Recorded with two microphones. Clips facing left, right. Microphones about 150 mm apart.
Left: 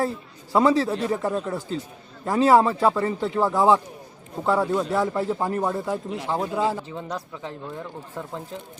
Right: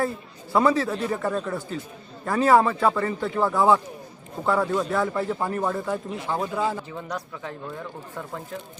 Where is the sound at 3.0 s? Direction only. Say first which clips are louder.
Left 2 dB; 25° left (ahead or behind).